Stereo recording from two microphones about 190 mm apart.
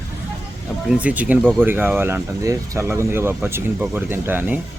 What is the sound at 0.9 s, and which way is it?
Speech, 5° right (ahead or behind).